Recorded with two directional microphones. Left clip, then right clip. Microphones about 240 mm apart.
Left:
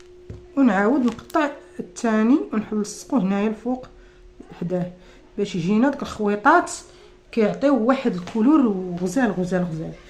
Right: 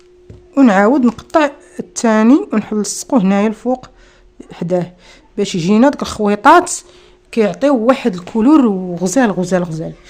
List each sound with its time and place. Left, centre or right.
0.5 s speech: right